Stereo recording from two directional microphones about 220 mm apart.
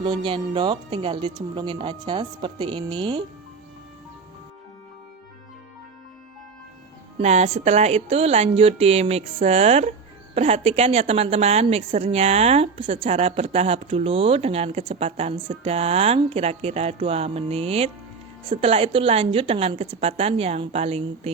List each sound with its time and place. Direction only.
0.0 s a woman's voice: 20° right (ahead or behind)
7.2 s a woman's voice: 30° right (ahead or behind)